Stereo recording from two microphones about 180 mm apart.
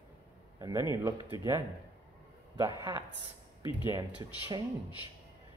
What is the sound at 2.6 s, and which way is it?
Speech, 20° right (ahead or behind).